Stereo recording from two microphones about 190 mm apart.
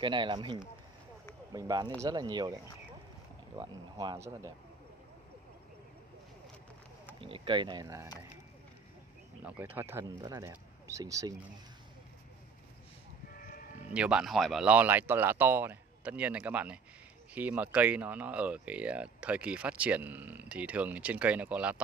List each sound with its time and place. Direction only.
0.0 s speech: 25° right (ahead or behind)
7.2 s speech: 30° right (ahead or behind)
9.4 s speech: 10° right (ahead or behind)
13.4 s sheep: 45° left (ahead or behind)
13.9 s speech: 5° right (ahead or behind)